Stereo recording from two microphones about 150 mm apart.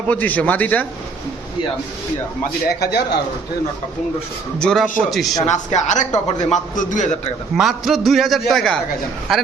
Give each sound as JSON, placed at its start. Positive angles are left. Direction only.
{"t": 0.1, "sound": "a man's voice", "side_deg": 10}
{"t": 2.6, "sound": "speech", "side_deg": 90}
{"t": 4.6, "sound": "a man's voice", "side_deg": 0}
{"t": 5.5, "sound": "a man's voice", "side_deg": 50}
{"t": 7.5, "sound": "a man's voice", "side_deg": 0}